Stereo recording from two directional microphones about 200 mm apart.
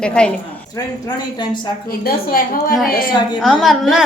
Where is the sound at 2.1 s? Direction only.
45° left (ahead or behind).